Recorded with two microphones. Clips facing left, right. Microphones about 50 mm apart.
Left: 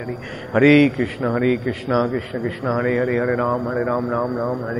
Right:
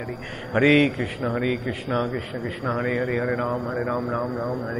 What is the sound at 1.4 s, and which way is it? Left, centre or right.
A man's voice, left.